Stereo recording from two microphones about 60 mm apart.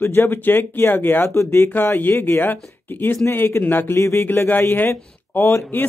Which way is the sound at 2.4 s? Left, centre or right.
Left.